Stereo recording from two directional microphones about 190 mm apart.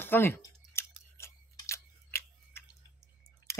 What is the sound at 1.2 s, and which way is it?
Tick-tock, 15° left (ahead or behind).